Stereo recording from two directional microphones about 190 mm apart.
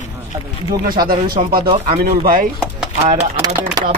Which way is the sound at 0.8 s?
50° right (ahead or behind).